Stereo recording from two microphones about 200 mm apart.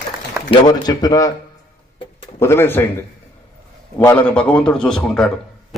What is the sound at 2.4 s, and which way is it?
A man's voice, 10° left (ahead or behind).